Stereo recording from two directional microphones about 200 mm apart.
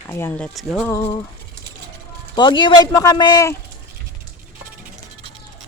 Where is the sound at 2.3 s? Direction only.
25° left (ahead or behind).